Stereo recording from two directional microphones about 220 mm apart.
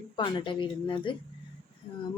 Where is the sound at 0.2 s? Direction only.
20° left (ahead or behind).